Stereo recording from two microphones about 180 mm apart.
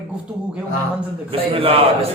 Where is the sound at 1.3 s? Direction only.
30° right (ahead or behind).